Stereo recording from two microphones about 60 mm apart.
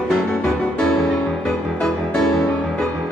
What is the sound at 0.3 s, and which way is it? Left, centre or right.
Music, centre.